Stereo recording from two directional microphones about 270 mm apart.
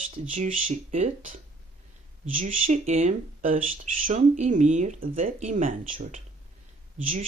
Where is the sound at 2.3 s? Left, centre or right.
Right.